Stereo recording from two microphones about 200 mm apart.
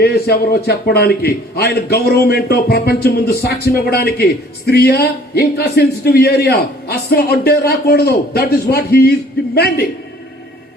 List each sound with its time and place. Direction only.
0.0 s a man's voice: 50° left (ahead or behind)